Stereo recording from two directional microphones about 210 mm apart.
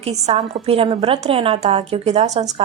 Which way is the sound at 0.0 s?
30° right (ahead or behind).